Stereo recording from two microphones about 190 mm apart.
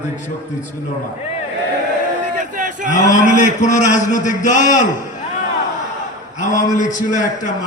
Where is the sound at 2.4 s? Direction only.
40° right (ahead or behind).